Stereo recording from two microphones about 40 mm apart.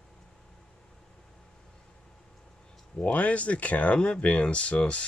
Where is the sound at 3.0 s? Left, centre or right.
Left.